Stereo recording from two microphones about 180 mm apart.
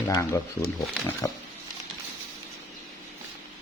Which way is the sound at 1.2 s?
20° left (ahead or behind).